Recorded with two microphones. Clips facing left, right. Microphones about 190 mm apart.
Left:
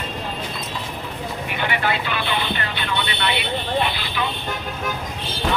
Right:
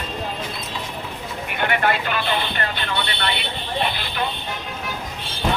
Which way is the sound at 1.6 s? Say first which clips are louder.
Right 3 dB; 50° right (ahead or behind).